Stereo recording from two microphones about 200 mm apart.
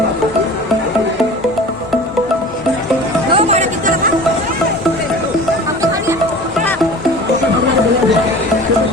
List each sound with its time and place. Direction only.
3.3 s music: 35° right (ahead or behind)